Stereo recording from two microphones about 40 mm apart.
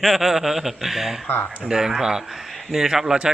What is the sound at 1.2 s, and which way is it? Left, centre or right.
Speech, left.